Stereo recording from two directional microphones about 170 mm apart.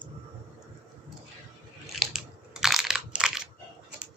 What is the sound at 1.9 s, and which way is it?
Crushing, centre (ahead or behind).